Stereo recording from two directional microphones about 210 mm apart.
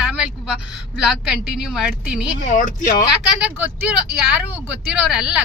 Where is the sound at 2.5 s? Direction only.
35° left (ahead or behind).